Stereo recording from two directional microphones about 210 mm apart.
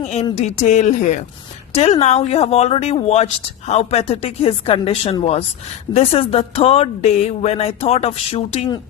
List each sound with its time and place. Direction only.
0.0 s speech: 30° left (ahead or behind)